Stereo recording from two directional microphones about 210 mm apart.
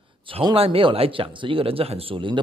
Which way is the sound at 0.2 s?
25° right (ahead or behind).